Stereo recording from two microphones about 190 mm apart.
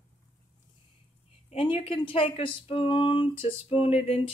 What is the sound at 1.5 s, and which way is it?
Speech, 30° left (ahead or behind).